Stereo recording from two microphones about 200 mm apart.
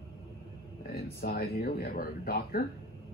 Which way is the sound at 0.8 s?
50° left (ahead or behind).